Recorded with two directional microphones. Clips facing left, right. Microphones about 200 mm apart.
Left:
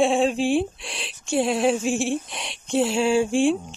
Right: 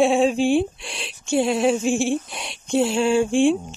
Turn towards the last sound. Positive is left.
turn(degrees=0)  # may be behind; listen again after turning